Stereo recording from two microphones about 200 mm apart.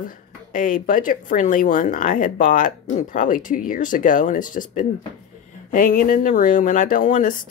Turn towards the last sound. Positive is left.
turn(degrees=40)  # may be behind; listen again after turning